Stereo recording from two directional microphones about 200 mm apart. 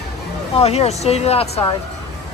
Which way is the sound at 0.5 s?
30° left (ahead or behind).